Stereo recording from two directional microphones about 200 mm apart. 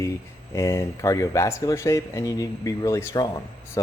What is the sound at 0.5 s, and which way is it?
Speech, 15° left (ahead or behind).